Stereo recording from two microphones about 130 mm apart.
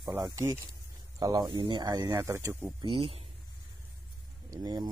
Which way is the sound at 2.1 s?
20° right (ahead or behind).